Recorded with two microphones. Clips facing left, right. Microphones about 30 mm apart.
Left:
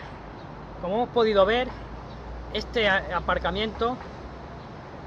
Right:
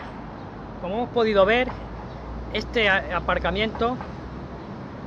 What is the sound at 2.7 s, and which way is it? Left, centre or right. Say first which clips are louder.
Speech: right 2 dB; centre.